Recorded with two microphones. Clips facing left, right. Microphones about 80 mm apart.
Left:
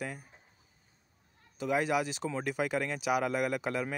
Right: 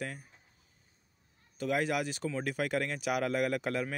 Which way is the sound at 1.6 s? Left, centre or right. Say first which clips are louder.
Left 2 dB; centre.